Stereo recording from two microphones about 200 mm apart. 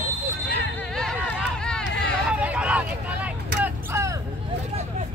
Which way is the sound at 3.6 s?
15° right (ahead or behind).